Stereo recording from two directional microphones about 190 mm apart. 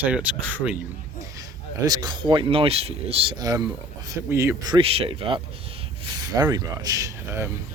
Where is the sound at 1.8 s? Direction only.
20° right (ahead or behind).